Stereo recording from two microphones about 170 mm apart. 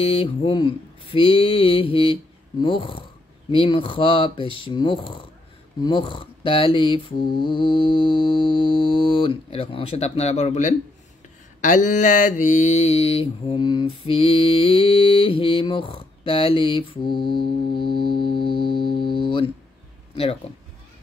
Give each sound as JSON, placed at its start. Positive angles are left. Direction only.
{"t": 0.0, "sound": "mantra", "side_deg": 30}
{"t": 5.8, "sound": "music", "side_deg": 30}
{"t": 11.6, "sound": "mantra", "side_deg": 45}